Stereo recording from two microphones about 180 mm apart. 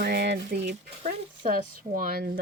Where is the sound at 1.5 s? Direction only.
50° right (ahead or behind).